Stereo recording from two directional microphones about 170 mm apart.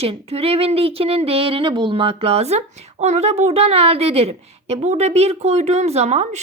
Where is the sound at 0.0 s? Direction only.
35° right (ahead or behind).